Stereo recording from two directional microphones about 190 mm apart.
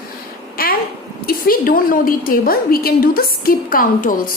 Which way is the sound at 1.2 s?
50° left (ahead or behind).